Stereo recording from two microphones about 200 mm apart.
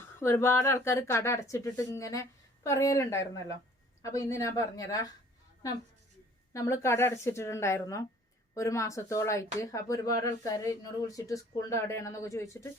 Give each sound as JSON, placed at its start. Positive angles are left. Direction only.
{"t": 0.0, "sound": "speech", "side_deg": 10}
{"t": 6.5, "sound": "speech", "side_deg": 15}